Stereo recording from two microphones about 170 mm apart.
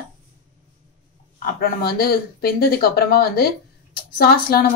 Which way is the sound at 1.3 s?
60° left (ahead or behind).